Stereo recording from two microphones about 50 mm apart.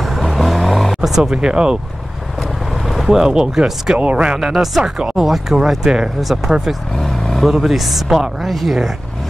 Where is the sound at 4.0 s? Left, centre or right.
Right.